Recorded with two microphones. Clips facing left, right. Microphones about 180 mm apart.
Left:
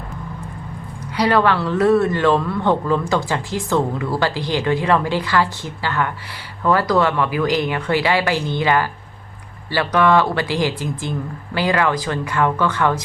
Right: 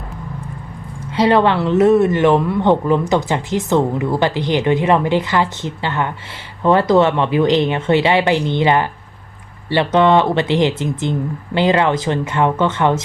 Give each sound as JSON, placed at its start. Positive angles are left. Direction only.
{"t": 1.1, "sound": "speech", "side_deg": -25}